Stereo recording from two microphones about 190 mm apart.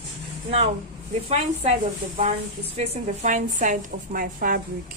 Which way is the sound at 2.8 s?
40° right (ahead or behind).